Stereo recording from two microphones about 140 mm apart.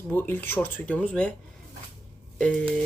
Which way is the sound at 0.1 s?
15° left (ahead or behind).